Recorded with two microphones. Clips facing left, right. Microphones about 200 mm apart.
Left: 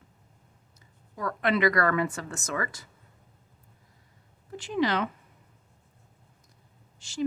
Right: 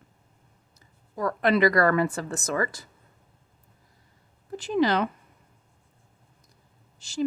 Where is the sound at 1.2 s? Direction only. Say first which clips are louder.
Right 4 dB; 35° right (ahead or behind).